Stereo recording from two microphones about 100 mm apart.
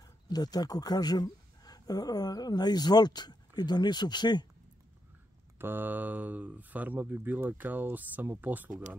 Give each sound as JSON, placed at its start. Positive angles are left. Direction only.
{"t": 0.0, "sound": "speech", "side_deg": 40}
{"t": 5.6, "sound": "speech", "side_deg": -20}